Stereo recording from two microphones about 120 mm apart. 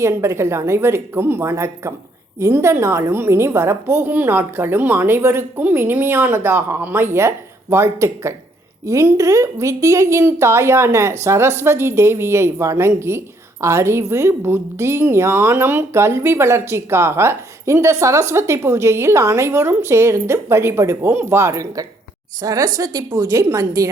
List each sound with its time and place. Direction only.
0.0 s speech: 20° right (ahead or behind)